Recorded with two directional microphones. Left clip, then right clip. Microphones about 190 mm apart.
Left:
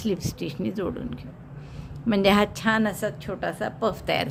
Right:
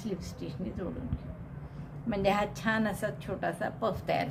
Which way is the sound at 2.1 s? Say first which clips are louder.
Left 8 dB; 45° left (ahead or behind).